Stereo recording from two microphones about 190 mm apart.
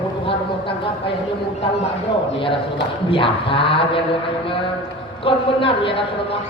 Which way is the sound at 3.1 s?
30° left (ahead or behind).